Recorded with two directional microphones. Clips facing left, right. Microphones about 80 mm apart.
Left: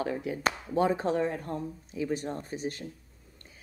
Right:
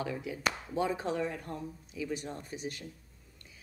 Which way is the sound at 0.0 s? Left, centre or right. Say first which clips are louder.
Left 4 dB; left.